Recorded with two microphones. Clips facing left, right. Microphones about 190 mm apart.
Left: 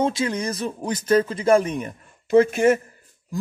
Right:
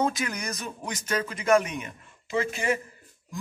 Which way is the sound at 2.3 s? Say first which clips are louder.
Left 11 dB; 55° left (ahead or behind).